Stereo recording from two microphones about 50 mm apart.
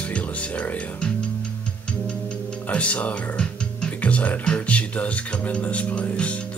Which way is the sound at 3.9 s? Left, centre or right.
Left.